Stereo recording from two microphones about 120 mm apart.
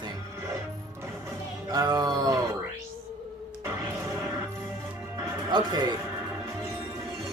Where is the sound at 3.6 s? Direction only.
25° right (ahead or behind).